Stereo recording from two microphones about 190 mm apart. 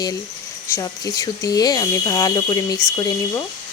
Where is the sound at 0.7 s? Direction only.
15° left (ahead or behind).